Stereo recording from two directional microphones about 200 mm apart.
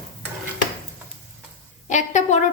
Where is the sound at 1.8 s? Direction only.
35° left (ahead or behind).